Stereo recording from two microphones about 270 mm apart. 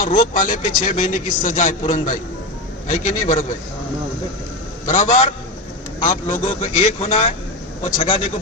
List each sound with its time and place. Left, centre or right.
0.0 s a man's voice: left
4.9 s a man's voice: left